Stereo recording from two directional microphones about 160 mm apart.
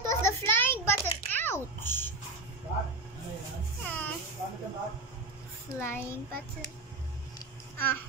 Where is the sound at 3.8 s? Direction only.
10° left (ahead or behind).